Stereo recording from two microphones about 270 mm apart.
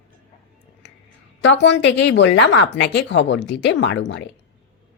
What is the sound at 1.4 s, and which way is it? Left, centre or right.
Speech, left.